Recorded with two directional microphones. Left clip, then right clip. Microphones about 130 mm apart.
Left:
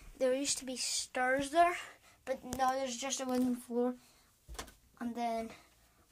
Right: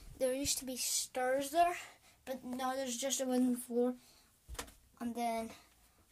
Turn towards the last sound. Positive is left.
turn(degrees=-5)  # may be behind; listen again after turning